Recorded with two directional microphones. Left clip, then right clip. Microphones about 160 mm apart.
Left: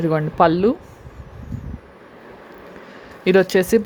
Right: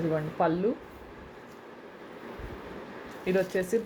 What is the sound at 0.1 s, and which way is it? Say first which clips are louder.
Speech: left 13 dB; 65° left (ahead or behind).